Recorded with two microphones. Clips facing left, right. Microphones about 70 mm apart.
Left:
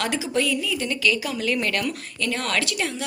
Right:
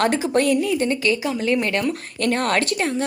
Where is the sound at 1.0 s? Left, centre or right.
Right.